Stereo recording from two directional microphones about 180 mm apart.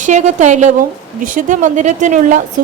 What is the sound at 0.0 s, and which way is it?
A woman's voice, 40° right (ahead or behind).